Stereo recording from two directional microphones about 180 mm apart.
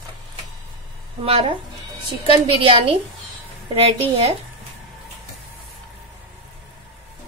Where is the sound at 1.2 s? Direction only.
35° right (ahead or behind).